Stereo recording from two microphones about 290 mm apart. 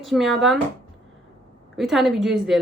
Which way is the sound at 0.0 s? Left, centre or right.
Centre.